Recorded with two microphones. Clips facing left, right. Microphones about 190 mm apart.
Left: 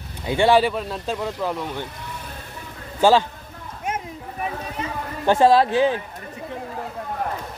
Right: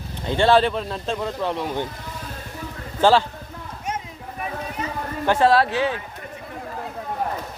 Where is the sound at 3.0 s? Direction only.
15° left (ahead or behind).